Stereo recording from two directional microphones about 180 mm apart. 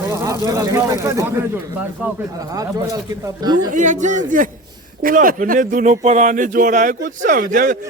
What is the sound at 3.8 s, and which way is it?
A man's voice, 45° right (ahead or behind).